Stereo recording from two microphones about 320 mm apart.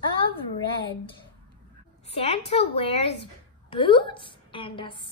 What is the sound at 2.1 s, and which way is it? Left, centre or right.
A woman's voice, centre.